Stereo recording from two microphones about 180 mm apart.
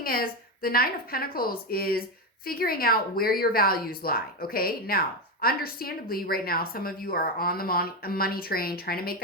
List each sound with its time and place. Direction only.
0.0 s a woman's voice: 55° left (ahead or behind)